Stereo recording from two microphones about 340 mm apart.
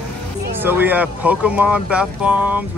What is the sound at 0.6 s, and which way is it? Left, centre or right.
Speech, centre.